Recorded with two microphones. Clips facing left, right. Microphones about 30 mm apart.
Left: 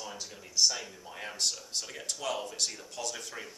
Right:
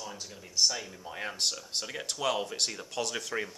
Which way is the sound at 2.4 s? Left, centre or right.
Right.